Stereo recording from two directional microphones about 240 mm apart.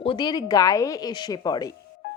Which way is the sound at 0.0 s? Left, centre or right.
Centre.